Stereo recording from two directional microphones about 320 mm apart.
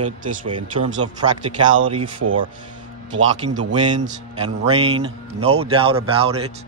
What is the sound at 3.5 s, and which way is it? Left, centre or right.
Speech, centre.